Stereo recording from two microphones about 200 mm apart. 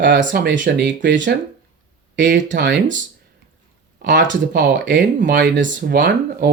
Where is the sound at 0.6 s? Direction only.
60° right (ahead or behind).